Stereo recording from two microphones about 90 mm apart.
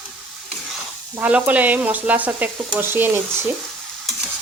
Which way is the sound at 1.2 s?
15° right (ahead or behind).